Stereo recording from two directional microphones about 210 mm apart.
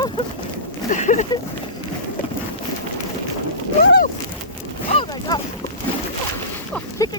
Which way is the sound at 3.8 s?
50° left (ahead or behind).